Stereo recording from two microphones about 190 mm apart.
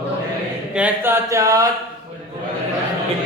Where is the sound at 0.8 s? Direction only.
10° right (ahead or behind).